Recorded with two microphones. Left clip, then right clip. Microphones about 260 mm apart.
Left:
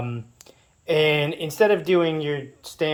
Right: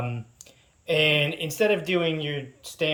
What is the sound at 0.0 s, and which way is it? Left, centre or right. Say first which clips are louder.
Speech: left 1 dB; centre.